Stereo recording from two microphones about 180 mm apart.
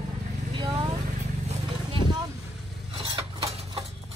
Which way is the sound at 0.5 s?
30° right (ahead or behind).